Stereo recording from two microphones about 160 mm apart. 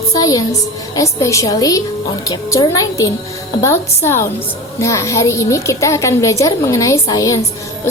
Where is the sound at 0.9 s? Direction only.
20° left (ahead or behind).